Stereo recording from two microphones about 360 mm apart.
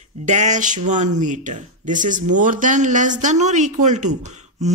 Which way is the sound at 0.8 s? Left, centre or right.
Centre.